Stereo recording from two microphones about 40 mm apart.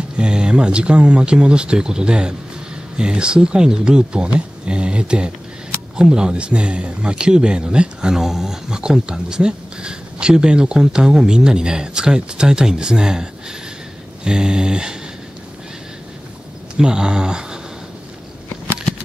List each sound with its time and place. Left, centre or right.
0.2 s speech: right
8.2 s speech: centre
16.7 s speech: centre